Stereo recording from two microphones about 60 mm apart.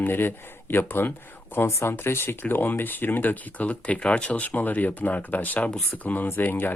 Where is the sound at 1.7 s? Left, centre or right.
Left.